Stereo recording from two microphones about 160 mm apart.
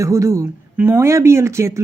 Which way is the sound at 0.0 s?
20° right (ahead or behind).